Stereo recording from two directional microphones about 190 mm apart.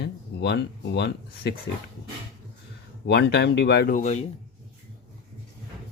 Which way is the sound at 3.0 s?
60° left (ahead or behind).